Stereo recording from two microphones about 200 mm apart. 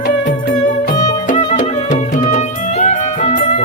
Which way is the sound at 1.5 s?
40° left (ahead or behind).